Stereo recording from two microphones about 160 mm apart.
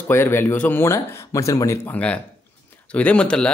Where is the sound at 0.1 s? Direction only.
15° left (ahead or behind).